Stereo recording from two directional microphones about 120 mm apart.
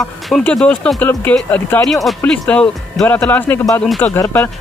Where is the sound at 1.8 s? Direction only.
Centre (ahead or behind).